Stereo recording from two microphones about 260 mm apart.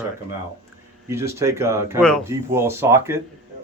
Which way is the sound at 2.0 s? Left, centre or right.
Centre.